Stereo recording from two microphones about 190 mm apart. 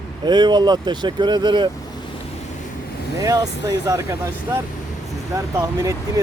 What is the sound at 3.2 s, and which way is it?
Speech, 20° right (ahead or behind).